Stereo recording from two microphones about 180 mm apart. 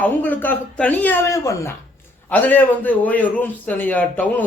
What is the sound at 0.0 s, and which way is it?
A man's voice, 10° left (ahead or behind).